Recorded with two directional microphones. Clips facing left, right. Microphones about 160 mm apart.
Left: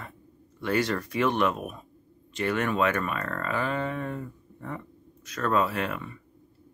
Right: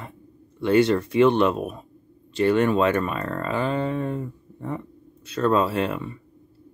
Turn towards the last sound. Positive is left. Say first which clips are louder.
# right 6 dB
turn(degrees=-30)  # may be behind; listen again after turning